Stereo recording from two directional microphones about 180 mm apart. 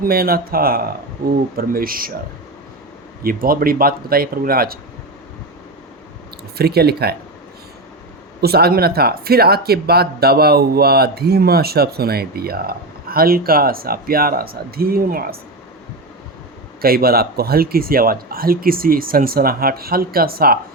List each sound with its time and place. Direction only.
0.0 s speech: 55° right (ahead or behind)
3.2 s speech: 55° right (ahead or behind)
6.6 s speech: 60° right (ahead or behind)
8.4 s speech: 60° right (ahead or behind)
16.8 s speech: 55° right (ahead or behind)